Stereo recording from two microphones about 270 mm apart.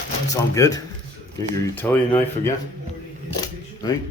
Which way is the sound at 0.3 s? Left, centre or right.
Centre.